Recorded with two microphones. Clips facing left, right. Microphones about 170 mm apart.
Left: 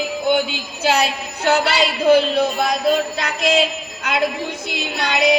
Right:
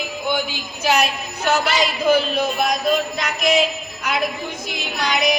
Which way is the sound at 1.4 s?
30° left (ahead or behind).